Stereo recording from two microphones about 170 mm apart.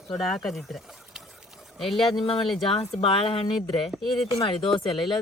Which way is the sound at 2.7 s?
35° left (ahead or behind).